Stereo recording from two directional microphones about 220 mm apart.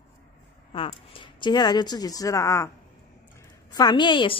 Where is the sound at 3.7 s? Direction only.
20° left (ahead or behind).